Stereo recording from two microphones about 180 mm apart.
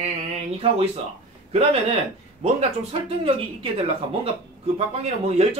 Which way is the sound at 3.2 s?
30° right (ahead or behind).